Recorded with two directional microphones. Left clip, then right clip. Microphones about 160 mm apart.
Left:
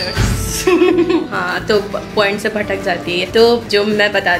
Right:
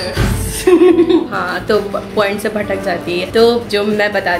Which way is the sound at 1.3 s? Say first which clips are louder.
Even; 15° left (ahead or behind).